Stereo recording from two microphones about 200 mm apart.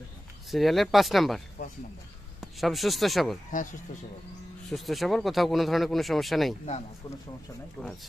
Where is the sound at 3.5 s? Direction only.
40° left (ahead or behind).